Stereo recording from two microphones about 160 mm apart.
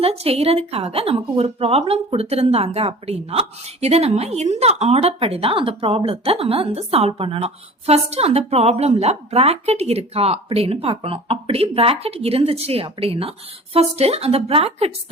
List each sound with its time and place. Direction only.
0.0 s a woman's voice: 40° right (ahead or behind)